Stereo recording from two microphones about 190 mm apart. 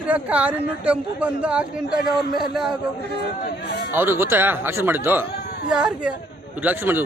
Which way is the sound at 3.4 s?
60° left (ahead or behind).